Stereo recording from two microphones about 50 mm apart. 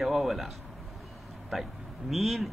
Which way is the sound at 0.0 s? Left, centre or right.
Centre.